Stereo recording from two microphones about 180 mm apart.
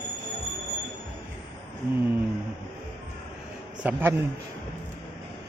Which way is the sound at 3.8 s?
10° right (ahead or behind).